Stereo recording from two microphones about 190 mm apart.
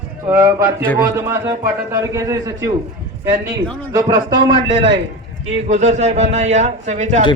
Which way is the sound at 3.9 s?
20° right (ahead or behind).